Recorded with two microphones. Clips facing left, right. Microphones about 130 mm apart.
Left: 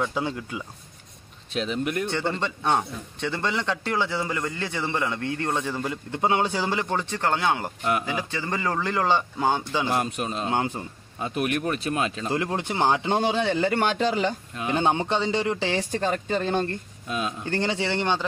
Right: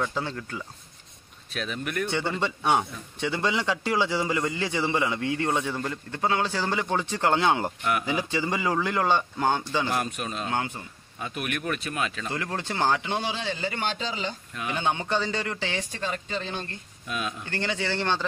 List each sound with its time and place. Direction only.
0.0 s speech: 10° left (ahead or behind)
1.5 s speech: 25° left (ahead or behind)
2.0 s a man's voice: 5° right (ahead or behind)
6.1 s speech: 20° left (ahead or behind)
6.8 s a man's voice: centre (ahead or behind)
7.1 s a man's voice: 15° right (ahead or behind); by 9.8 s 5° left (ahead or behind)
10.1 s speech: 30° left (ahead or behind)
13.1 s a man's voice: 50° left (ahead or behind)
14.5 s speech: 30° left (ahead or behind)
15.7 s speech: 45° left (ahead or behind)
17.1 s speech: 30° left (ahead or behind)
17.9 s speech: 15° left (ahead or behind)